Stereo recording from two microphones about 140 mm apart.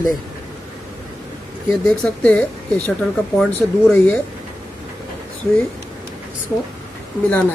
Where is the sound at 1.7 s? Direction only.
10° left (ahead or behind).